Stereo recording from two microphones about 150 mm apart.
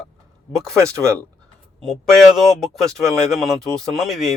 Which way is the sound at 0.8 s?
20° right (ahead or behind).